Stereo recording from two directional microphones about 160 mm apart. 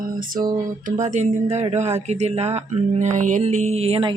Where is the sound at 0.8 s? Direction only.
50° right (ahead or behind).